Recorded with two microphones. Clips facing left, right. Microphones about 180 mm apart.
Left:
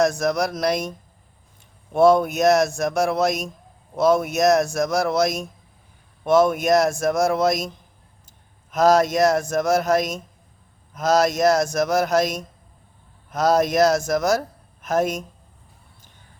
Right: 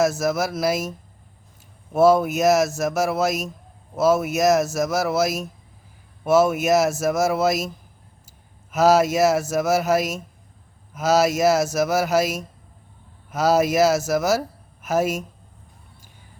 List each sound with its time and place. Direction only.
0.0 s a man's voice: 5° right (ahead or behind)
8.7 s a man's voice: 5° right (ahead or behind)